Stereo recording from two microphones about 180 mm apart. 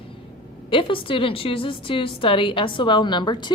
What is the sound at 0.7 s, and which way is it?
A woman's voice, 30° left (ahead or behind).